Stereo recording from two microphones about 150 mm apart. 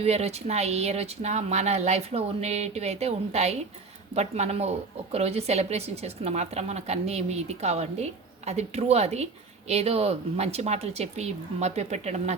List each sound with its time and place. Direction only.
0.0 s a woman's voice: 45° right (ahead or behind)